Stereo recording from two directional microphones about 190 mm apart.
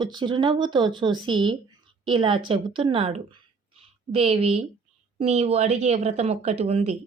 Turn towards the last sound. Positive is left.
turn(degrees=-35)  # may be behind; listen again after turning